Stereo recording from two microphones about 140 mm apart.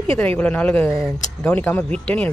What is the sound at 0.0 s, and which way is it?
Speech, 10° left (ahead or behind).